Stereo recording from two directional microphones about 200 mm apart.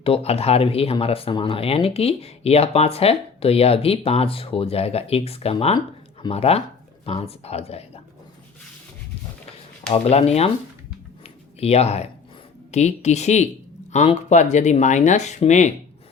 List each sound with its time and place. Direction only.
0.0 s speech: 30° left (ahead or behind)
9.9 s speech: 30° left (ahead or behind)
11.6 s speech: 30° left (ahead or behind)